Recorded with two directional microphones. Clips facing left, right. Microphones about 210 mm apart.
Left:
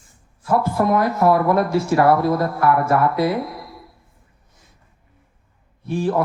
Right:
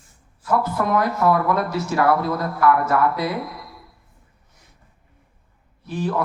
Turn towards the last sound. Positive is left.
turn(degrees=25)  # may be behind; listen again after turning